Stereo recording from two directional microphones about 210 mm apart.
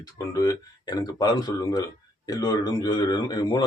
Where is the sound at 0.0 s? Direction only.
15° left (ahead or behind).